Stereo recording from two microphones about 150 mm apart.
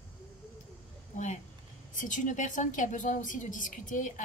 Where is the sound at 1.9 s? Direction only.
60° left (ahead or behind).